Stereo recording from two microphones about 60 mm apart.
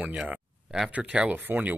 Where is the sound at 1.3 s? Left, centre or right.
Right.